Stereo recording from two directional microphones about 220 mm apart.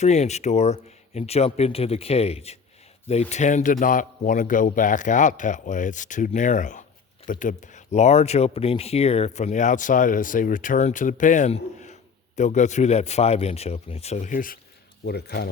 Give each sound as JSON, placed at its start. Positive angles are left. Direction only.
{"t": 0.0, "sound": "speech", "side_deg": 30}